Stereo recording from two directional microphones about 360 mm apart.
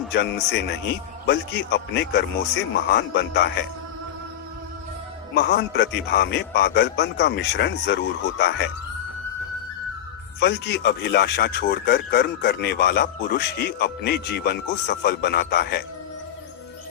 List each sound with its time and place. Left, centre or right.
0.1 s speech: left
5.3 s speech: left
10.4 s speech: left